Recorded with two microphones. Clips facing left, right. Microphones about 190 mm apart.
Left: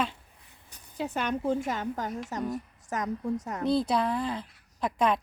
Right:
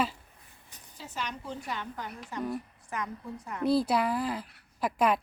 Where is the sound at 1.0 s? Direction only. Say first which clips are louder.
Left 9 dB; 60° left (ahead or behind); by 3.6 s 45° left (ahead or behind).